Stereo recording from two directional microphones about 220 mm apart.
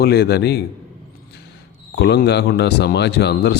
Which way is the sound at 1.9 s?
50° left (ahead or behind).